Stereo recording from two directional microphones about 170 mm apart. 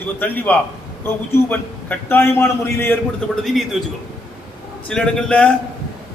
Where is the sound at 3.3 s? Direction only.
Centre (ahead or behind).